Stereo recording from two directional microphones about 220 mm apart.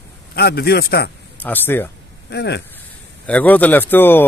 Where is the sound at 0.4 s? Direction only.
45° left (ahead or behind).